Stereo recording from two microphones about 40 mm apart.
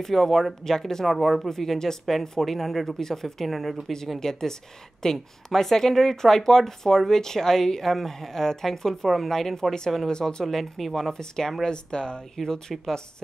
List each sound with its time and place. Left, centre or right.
0.0 s speech: centre
1.0 s speech: centre
4.2 s speech: centre
10.1 s speech: centre
10.4 s speech: centre
11.1 s speech: centre